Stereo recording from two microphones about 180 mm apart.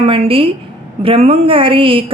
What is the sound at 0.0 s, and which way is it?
A woman's voice, 30° right (ahead or behind).